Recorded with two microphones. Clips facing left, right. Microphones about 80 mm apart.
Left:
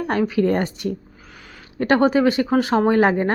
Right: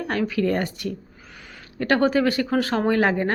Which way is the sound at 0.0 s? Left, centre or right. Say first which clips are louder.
Left 4 dB; left.